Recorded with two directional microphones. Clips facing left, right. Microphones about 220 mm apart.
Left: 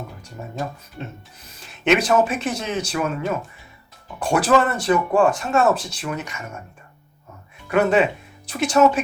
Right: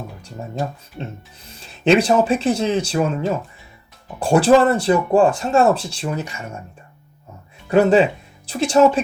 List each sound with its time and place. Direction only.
1.5 s speech: 30° right (ahead or behind)
7.7 s speech: 30° right (ahead or behind)